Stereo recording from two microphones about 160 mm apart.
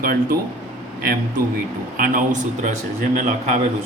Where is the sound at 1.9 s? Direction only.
55° right (ahead or behind).